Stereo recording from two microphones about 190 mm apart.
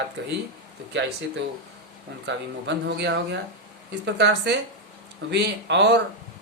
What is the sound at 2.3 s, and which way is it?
Speech, 65° right (ahead or behind).